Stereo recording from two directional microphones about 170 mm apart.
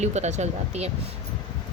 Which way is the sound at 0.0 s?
40° right (ahead or behind).